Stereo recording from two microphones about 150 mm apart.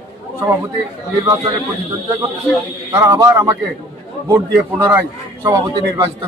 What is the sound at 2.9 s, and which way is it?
A man's voice, 20° right (ahead or behind).